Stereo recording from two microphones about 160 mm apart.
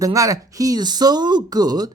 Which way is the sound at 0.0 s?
20° right (ahead or behind).